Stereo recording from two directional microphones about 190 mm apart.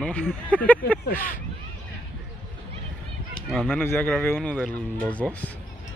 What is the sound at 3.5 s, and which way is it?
Speech, 5° left (ahead or behind).